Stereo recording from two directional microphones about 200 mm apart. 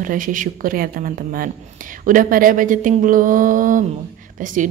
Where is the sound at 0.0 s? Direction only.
40° right (ahead or behind).